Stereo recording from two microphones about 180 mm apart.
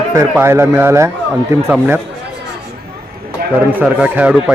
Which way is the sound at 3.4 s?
60° right (ahead or behind).